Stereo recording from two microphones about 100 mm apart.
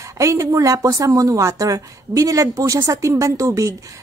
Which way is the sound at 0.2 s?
30° right (ahead or behind).